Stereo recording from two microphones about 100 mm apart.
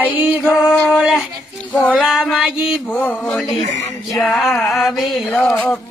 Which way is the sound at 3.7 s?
35° left (ahead or behind).